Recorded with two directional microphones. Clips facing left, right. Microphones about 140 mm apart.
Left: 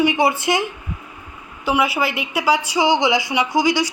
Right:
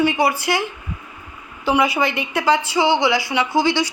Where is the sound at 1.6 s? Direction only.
5° left (ahead or behind).